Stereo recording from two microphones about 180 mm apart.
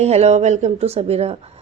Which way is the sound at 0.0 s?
35° right (ahead or behind).